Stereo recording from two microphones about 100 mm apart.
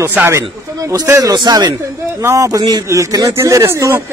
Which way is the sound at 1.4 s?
45° right (ahead or behind).